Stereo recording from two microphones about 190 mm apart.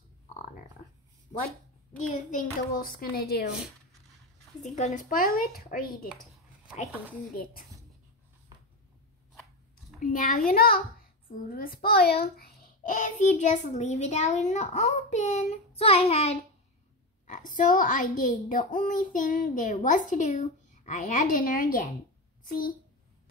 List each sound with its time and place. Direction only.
2.0 s a woman's voice: 45° left (ahead or behind)
4.6 s a woman's voice: 40° left (ahead or behind)
9.4 s a sound: centre (ahead or behind)
10.0 s a woman's voice: 45° left (ahead or behind)
17.3 s a woman's voice: 45° left (ahead or behind)